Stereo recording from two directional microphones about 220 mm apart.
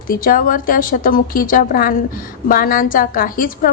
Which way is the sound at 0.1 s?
40° left (ahead or behind).